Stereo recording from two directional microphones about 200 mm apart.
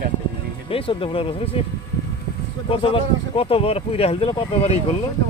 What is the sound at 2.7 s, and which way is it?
Speech, 25° left (ahead or behind).